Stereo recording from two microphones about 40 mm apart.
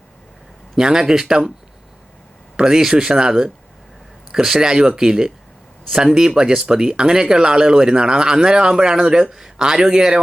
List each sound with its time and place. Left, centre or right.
0.8 s speech: centre
2.6 s speech: centre